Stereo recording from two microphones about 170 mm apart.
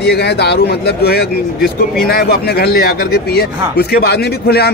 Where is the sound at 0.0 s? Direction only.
75° left (ahead or behind).